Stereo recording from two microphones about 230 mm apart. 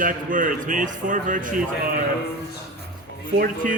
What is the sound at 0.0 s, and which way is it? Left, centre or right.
A man's voice, right.